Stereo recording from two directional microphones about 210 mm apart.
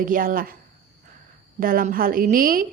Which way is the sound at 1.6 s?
40° right (ahead or behind).